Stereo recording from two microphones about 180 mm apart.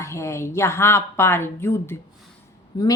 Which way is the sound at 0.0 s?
15° left (ahead or behind).